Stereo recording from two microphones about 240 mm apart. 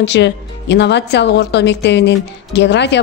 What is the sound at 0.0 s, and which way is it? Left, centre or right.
Speech, left.